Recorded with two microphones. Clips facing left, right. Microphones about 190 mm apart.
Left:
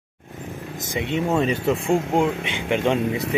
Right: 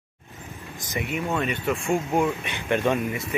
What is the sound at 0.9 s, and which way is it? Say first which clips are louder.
Speech: left 5 dB; 25° left (ahead or behind).